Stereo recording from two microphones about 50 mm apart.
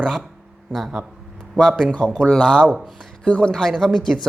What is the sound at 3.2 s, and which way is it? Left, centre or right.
Speech, left.